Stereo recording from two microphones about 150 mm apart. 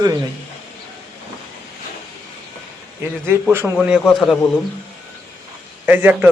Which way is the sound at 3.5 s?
10° right (ahead or behind).